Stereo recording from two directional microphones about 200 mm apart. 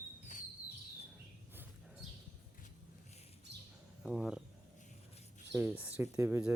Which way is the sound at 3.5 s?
60° right (ahead or behind).